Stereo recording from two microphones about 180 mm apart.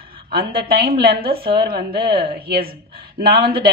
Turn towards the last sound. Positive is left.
turn(degrees=-60)  # may be behind; listen again after turning